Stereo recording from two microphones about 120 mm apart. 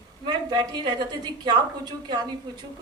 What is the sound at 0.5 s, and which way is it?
A man's voice, 35° right (ahead or behind).